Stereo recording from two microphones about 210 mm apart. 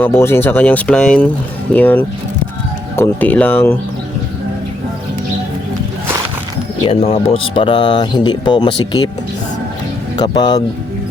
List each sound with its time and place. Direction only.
0.0 s speech: 10° left (ahead or behind)
6.8 s speech: 25° left (ahead or behind)
10.2 s speech: 20° left (ahead or behind)